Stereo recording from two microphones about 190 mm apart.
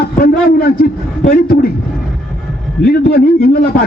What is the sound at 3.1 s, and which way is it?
Speech, 55° left (ahead or behind).